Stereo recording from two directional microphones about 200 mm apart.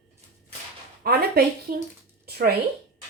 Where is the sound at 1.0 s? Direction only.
50° right (ahead or behind).